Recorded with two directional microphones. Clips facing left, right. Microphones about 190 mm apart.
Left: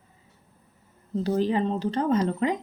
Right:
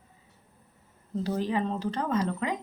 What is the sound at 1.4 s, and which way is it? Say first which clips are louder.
A woman's voice: left 5 dB; 30° left (ahead or behind).